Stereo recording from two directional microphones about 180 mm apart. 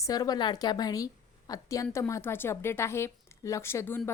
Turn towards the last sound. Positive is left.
turn(degrees=15)  # may be behind; listen again after turning